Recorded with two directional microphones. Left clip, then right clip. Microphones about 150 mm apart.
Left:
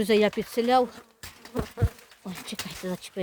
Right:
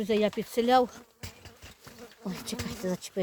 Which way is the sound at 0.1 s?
40° left (ahead or behind).